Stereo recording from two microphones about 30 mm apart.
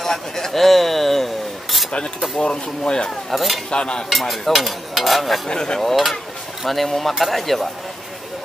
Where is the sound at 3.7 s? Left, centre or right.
Left.